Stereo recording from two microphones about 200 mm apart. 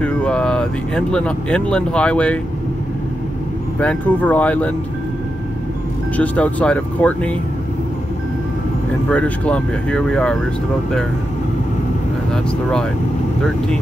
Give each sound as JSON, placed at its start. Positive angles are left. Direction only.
{"t": 0.0, "sound": "speech", "side_deg": 5}
{"t": 3.8, "sound": "speech", "side_deg": 10}
{"t": 6.1, "sound": "speech", "side_deg": 5}
{"t": 9.1, "sound": "speech", "side_deg": 5}